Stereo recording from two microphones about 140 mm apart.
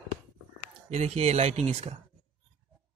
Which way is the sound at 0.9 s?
50° right (ahead or behind).